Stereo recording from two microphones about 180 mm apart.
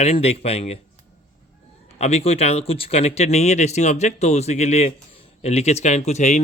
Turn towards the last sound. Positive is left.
turn(degrees=40)  # may be behind; listen again after turning